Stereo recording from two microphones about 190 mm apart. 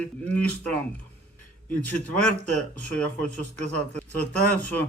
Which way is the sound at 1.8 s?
5° left (ahead or behind).